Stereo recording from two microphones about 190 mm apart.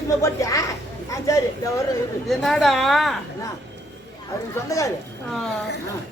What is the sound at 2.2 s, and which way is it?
Speech, centre (ahead or behind).